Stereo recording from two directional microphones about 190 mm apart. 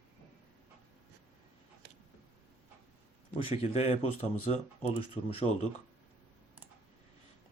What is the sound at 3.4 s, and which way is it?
Speech, 30° left (ahead or behind).